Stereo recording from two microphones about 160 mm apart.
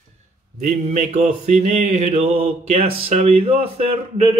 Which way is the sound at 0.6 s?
50° right (ahead or behind).